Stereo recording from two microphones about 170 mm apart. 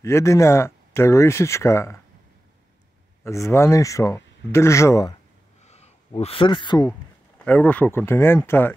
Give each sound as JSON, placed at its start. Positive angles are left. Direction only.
{"t": 0.0, "sound": "speech", "side_deg": 15}
{"t": 3.3, "sound": "speech", "side_deg": 15}
{"t": 5.7, "sound": "speech", "side_deg": 40}
{"t": 7.4, "sound": "speech", "side_deg": 10}